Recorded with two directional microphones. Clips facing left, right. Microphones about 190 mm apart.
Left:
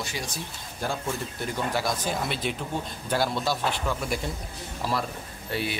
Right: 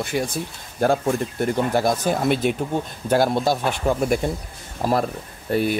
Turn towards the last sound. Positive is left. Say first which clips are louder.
# right 9 dB
turn(degrees=-50)  # may be behind; listen again after turning